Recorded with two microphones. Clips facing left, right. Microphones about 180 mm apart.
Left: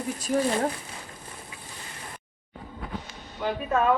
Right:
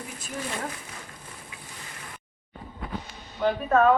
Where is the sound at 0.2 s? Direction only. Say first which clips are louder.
Left 9 dB; 35° left (ahead or behind).